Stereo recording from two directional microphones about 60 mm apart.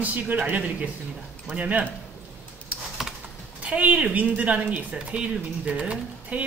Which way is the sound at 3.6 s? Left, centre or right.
Right.